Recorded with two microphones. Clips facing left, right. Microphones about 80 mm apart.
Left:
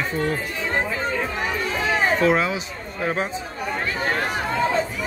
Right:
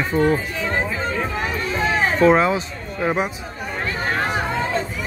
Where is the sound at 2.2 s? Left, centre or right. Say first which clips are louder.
Right 5 dB; right.